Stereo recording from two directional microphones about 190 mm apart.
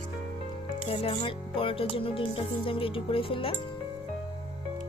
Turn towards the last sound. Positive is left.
turn(degrees=30)  # may be behind; listen again after turning